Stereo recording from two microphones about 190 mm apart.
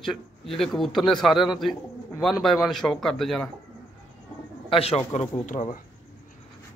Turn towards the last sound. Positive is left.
turn(degrees=35)  # may be behind; listen again after turning